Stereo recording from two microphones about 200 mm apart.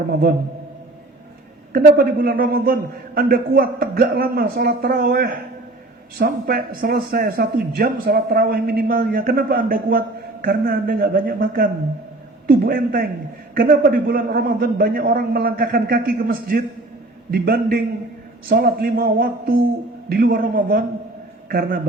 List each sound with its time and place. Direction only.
1.7 s speech: 45° right (ahead or behind)